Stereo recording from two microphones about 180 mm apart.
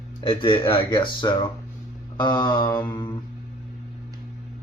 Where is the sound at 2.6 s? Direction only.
10° left (ahead or behind).